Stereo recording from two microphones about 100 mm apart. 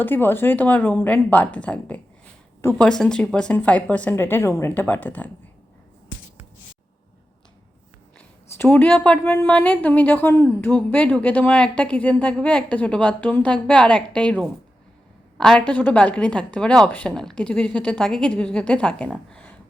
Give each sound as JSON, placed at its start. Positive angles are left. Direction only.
{"t": 0.0, "sound": "a woman's voice", "side_deg": 20}
{"t": 4.7, "sound": "a woman's voice", "side_deg": 15}
{"t": 8.5, "sound": "a woman's voice", "side_deg": 20}
{"t": 15.4, "sound": "a woman's voice", "side_deg": 5}
{"t": 19.3, "sound": "a sound", "side_deg": 15}